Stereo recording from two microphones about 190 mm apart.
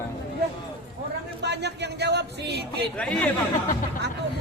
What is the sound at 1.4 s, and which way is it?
Speech, 65° right (ahead or behind).